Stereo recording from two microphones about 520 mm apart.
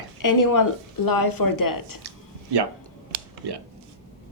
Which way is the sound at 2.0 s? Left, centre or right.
Right.